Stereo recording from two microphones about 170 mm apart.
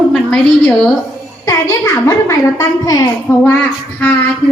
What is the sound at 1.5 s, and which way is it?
A woman's voice, 15° left (ahead or behind).